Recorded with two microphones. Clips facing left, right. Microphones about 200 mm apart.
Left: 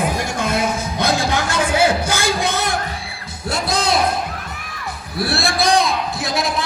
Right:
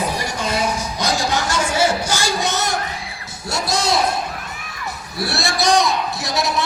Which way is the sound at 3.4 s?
55° left (ahead or behind).